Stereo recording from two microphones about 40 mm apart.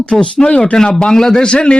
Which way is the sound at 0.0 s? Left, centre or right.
Left.